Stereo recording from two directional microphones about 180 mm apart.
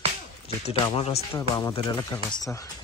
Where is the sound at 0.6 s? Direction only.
35° left (ahead or behind).